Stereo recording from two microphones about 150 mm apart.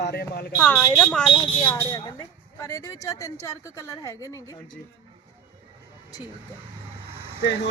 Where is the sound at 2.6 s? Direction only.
20° left (ahead or behind).